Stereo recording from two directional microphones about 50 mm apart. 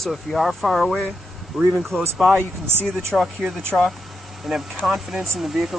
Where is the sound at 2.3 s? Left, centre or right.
Right.